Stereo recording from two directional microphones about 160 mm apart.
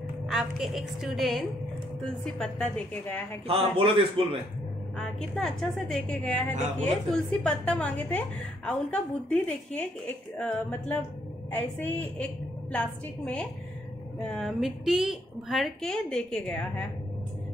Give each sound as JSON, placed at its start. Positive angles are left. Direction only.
{"t": 0.3, "sound": "a woman's voice", "side_deg": 0}
{"t": 3.4, "sound": "a man's voice", "side_deg": -35}
{"t": 4.9, "sound": "a woman's voice", "side_deg": 5}